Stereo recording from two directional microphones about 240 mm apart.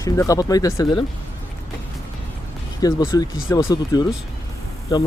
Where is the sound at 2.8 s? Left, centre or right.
Centre.